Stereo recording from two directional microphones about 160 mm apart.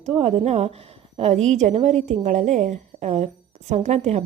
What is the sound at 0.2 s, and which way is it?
A woman's voice, 40° right (ahead or behind).